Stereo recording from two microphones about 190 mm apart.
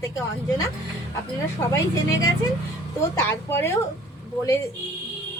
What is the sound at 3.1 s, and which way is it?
Speech, 15° left (ahead or behind).